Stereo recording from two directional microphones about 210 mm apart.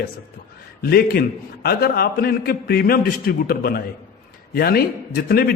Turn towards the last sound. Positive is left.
turn(degrees=45)  # may be behind; listen again after turning